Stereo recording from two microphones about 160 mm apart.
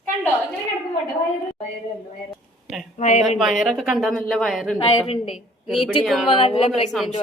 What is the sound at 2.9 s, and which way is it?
Speech, 50° left (ahead or behind).